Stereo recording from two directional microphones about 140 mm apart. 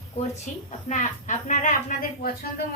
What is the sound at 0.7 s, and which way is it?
Speech, 60° left (ahead or behind).